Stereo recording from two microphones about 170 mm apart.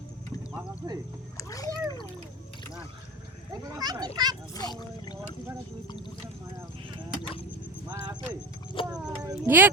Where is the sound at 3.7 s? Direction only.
25° right (ahead or behind).